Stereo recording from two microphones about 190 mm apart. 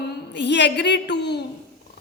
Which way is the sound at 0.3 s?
65° left (ahead or behind).